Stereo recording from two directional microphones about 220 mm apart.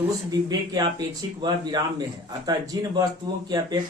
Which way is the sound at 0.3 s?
20° right (ahead or behind).